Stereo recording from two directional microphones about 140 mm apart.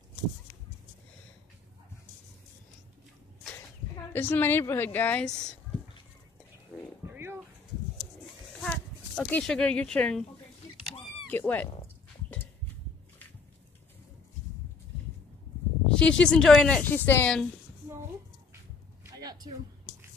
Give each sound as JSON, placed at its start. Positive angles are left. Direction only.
{"t": 4.1, "sound": "speech", "side_deg": 15}
{"t": 7.1, "sound": "a sound", "side_deg": -15}
{"t": 8.6, "sound": "speech", "side_deg": 10}
{"t": 11.2, "sound": "speech", "side_deg": 10}
{"t": 15.9, "sound": "speech", "side_deg": 5}
{"t": 19.1, "sound": "a sound", "side_deg": -30}